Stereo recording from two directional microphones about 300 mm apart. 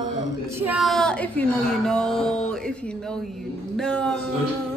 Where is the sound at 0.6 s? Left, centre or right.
Centre.